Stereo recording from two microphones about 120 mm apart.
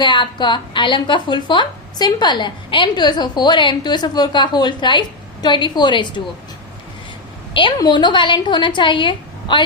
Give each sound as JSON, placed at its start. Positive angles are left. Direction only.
{"t": 0.0, "sound": "a woman's voice", "side_deg": 40}
{"t": 7.8, "sound": "a woman's voice", "side_deg": 40}